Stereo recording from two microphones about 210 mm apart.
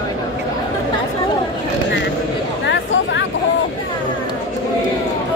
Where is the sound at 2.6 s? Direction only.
60° left (ahead or behind).